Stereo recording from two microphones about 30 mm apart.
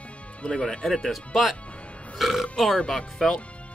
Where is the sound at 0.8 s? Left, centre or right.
Centre.